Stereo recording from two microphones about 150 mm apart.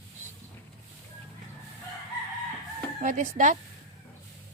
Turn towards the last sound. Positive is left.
turn(degrees=-60)  # may be behind; listen again after turning